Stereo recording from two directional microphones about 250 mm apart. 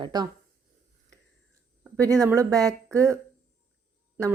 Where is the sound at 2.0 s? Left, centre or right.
Centre.